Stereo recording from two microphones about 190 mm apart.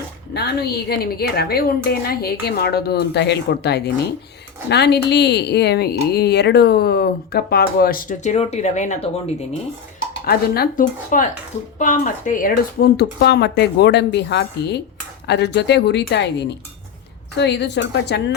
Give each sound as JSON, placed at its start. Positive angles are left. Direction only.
{"t": 0.3, "sound": "speech", "side_deg": 55}
{"t": 10.2, "sound": "speech", "side_deg": 55}